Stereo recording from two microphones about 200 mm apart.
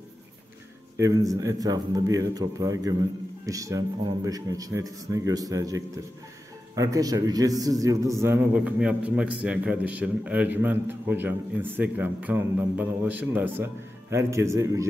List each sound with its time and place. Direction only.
0.9 s a man's voice: 15° right (ahead or behind)